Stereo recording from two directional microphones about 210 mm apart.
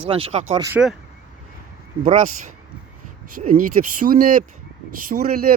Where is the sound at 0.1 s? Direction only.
25° right (ahead or behind).